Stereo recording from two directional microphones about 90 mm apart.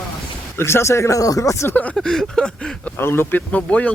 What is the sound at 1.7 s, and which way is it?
Speech, 15° left (ahead or behind).